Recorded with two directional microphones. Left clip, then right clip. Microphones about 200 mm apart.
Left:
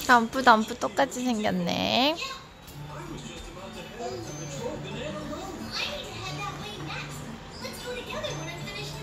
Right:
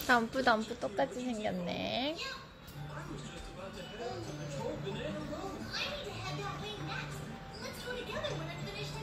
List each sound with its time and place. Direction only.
0.0 s speech: 10° left (ahead or behind)